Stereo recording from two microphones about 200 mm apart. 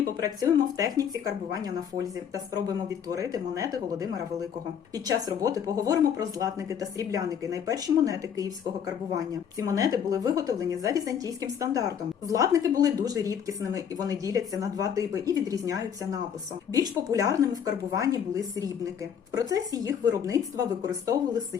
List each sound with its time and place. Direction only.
0.2 s a woman's voice: 20° right (ahead or behind)